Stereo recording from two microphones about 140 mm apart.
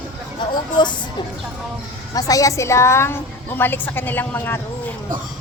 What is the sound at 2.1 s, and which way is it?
A woman's voice, 25° left (ahead or behind).